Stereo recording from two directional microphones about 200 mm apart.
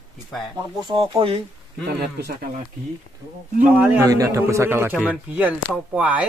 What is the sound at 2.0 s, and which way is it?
Speech, 50° right (ahead or behind).